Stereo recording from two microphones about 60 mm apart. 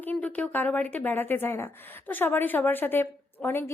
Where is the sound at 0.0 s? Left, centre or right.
Left.